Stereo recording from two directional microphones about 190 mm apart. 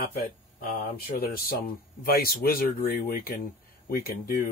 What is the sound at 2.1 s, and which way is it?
Speech, 50° left (ahead or behind).